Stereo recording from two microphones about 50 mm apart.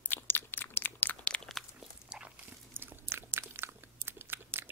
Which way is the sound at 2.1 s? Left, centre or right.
Right.